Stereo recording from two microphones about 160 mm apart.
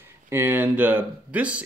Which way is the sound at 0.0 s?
15° right (ahead or behind).